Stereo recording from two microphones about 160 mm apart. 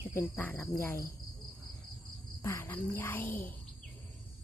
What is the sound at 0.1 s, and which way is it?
Speech, 15° left (ahead or behind).